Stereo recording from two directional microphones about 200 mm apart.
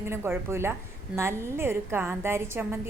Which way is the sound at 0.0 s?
15° right (ahead or behind).